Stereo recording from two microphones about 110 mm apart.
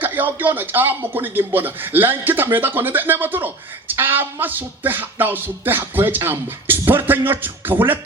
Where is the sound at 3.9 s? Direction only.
20° right (ahead or behind).